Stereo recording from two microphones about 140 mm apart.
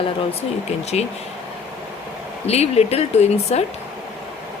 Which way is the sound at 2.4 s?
50° left (ahead or behind).